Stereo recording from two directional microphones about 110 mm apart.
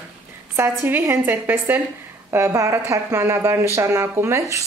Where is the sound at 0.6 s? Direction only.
20° right (ahead or behind).